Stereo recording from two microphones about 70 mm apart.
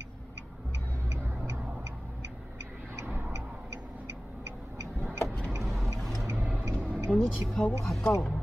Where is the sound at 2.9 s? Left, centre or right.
Right.